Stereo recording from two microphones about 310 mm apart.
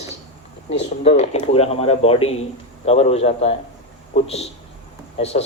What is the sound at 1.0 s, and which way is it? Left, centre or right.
A man's voice, left.